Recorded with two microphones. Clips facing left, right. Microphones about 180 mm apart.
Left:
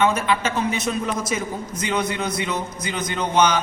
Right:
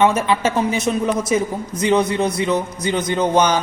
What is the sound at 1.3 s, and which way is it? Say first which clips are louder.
A man's voice: right 7 dB; 30° right (ahead or behind).